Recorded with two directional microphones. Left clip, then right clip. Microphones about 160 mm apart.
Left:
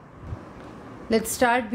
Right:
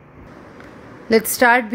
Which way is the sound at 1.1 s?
20° right (ahead or behind).